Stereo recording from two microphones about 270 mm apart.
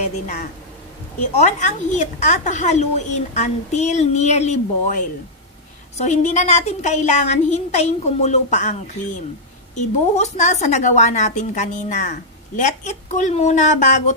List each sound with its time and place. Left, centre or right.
0.0 s a woman's voice: left